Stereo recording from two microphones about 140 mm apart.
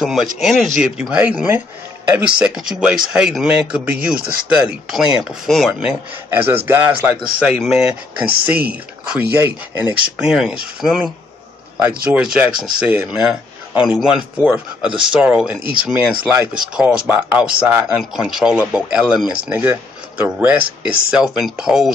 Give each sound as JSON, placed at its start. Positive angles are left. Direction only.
{"t": 0.0, "sound": "speech", "side_deg": 0}
{"t": 6.3, "sound": "speech", "side_deg": -15}
{"t": 7.3, "sound": "speech", "side_deg": -5}
{"t": 10.1, "sound": "speech", "side_deg": -5}